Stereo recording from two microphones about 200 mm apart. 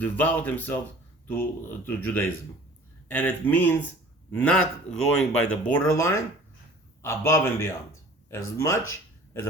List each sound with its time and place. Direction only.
0.0 s speech: 10° left (ahead or behind)
7.3 s speech: 15° left (ahead or behind)
8.9 s a sound: 15° left (ahead or behind)